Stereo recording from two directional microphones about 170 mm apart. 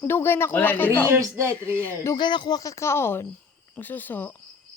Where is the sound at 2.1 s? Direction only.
25° left (ahead or behind); by 4.3 s 10° left (ahead or behind).